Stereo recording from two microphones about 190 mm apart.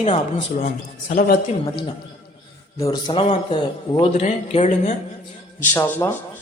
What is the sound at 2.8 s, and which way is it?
Speech, 20° left (ahead or behind).